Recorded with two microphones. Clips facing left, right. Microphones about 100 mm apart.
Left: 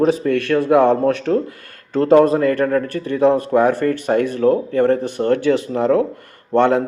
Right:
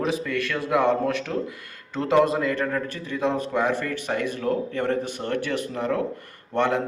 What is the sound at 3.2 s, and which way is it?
Speech, 40° left (ahead or behind).